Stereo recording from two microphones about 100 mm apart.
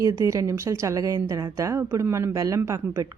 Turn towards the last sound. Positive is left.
turn(degrees=-30)  # may be behind; listen again after turning